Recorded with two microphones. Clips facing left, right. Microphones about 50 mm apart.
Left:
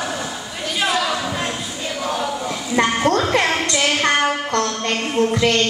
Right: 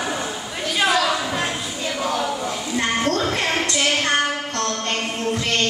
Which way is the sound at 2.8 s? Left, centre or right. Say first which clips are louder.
Left 6 dB; left.